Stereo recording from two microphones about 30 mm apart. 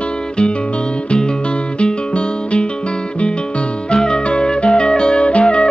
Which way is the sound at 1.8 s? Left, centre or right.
Left.